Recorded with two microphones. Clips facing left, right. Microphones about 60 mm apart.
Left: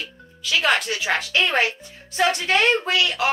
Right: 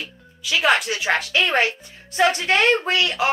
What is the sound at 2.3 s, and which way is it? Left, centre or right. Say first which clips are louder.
Speech: right 1 dB; right.